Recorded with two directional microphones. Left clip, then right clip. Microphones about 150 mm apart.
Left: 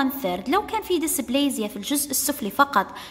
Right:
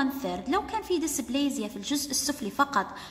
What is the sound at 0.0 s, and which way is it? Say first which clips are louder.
A woman's voice: left 5 dB; 20° left (ahead or behind).